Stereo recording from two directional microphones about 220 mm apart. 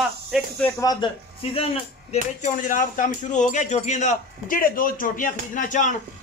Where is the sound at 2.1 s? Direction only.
35° left (ahead or behind).